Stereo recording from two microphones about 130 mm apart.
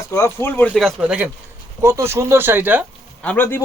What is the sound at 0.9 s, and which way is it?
Speech, 10° right (ahead or behind).